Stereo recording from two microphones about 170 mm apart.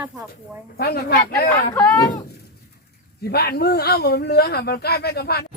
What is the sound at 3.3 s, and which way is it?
Speech, 65° left (ahead or behind).